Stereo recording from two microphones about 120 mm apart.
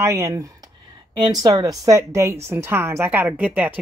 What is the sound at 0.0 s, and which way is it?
A woman's voice, 25° right (ahead or behind).